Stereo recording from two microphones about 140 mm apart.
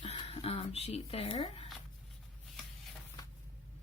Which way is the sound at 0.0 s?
45° left (ahead or behind).